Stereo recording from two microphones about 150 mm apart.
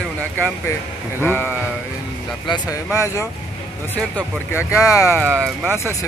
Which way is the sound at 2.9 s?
20° left (ahead or behind).